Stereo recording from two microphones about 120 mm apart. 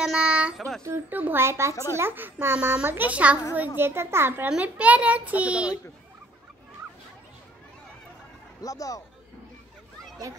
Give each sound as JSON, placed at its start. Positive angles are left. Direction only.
{"t": 0.0, "sound": "a child's voice", "side_deg": -10}
{"t": 8.6, "sound": "speech", "side_deg": 30}